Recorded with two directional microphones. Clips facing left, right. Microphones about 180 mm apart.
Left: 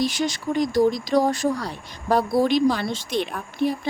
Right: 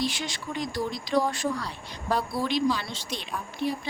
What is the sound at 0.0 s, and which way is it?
Speech, 40° left (ahead or behind).